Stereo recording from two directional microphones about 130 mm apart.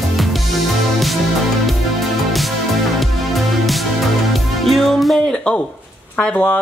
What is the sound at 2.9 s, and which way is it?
Music, centre (ahead or behind).